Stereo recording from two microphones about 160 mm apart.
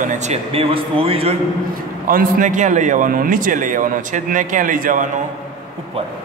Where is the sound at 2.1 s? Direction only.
60° right (ahead or behind).